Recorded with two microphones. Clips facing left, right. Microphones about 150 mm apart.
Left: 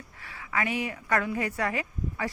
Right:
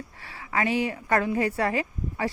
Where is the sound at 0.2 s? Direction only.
30° right (ahead or behind).